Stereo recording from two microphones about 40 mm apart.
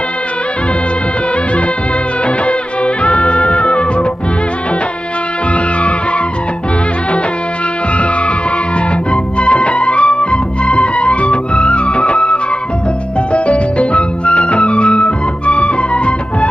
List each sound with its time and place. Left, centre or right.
2.2 s music: left
9.4 s music: left